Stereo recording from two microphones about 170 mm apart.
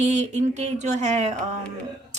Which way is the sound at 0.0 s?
45° right (ahead or behind).